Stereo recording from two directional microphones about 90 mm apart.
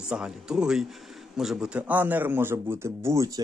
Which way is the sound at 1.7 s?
15° right (ahead or behind).